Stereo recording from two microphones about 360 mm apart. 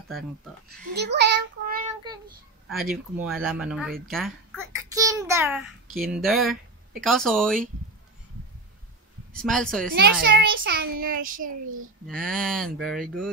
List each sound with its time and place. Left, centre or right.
0.9 s child singing: right
2.7 s speech: centre
4.1 s a sound: centre
6.1 s speech: centre
9.3 s speech: centre
10.2 s a child's voice: right
12.1 s speech: centre